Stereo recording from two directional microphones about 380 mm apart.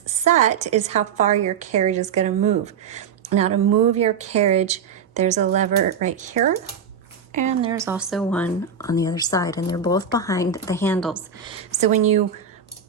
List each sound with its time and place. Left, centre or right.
0.3 s speech: centre
11.4 s speech: centre